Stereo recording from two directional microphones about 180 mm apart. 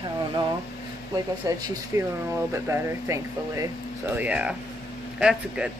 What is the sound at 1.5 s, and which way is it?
Speech, 15° right (ahead or behind).